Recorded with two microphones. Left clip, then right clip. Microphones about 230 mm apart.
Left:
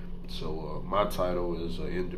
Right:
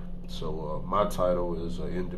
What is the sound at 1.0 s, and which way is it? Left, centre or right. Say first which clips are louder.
Speech: right 3 dB; centre.